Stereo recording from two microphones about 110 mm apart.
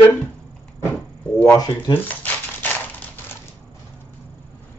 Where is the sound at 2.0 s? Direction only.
15° left (ahead or behind).